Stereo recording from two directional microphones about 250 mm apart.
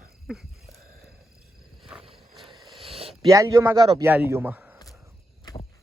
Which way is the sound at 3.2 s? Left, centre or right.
Centre.